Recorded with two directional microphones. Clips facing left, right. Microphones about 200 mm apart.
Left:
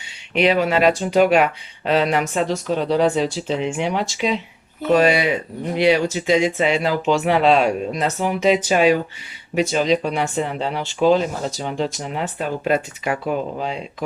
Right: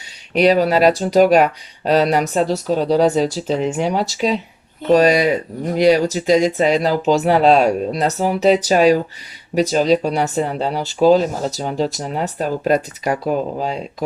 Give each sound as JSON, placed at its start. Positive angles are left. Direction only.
{"t": 0.3, "sound": "speech", "side_deg": -40}